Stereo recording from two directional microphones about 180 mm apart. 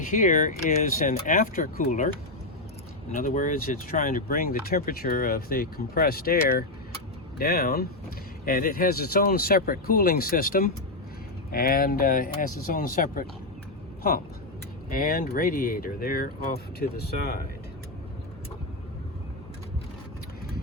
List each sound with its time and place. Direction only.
0.1 s speech: 45° left (ahead or behind)
3.2 s speech: 45° left (ahead or behind)
14.8 s speech: 50° left (ahead or behind)